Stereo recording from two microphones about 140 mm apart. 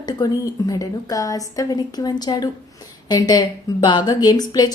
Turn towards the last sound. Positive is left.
turn(degrees=30)  # may be behind; listen again after turning